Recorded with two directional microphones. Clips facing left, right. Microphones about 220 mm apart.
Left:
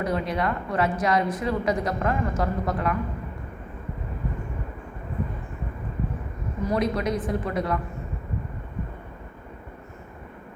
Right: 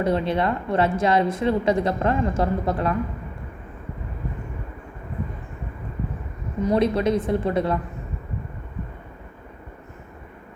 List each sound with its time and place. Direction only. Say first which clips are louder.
0.0 s a woman's voice: right 4 dB; 25° right (ahead or behind)
6.7 s a woman's voice: right 5 dB; 25° right (ahead or behind)